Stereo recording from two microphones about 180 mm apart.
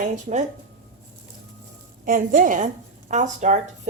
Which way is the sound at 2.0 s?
50° right (ahead or behind).